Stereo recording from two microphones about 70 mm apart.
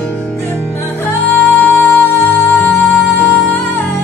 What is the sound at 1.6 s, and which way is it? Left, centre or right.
Music, left.